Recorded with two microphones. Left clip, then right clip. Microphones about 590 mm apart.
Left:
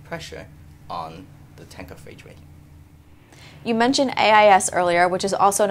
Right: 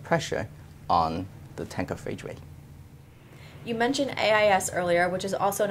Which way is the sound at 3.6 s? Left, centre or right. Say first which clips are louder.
Left 7 dB; left.